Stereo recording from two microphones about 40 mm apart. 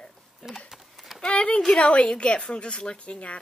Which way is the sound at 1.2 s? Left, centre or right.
Left.